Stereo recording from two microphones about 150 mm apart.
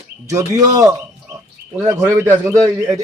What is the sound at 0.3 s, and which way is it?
Speech, 20° right (ahead or behind).